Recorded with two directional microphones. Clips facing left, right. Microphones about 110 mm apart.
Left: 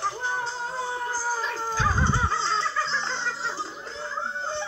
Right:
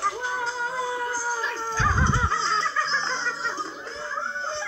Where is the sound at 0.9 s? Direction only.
45° left (ahead or behind).